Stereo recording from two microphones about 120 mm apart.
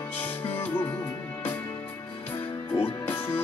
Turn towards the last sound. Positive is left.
turn(degrees=15)  # may be behind; listen again after turning